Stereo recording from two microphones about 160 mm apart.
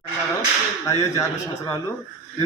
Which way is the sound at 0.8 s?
20° left (ahead or behind).